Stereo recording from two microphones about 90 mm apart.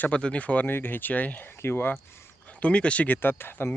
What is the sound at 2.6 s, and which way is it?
Speech, 15° left (ahead or behind).